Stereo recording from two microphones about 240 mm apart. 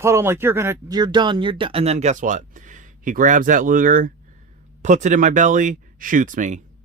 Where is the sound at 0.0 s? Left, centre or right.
Centre.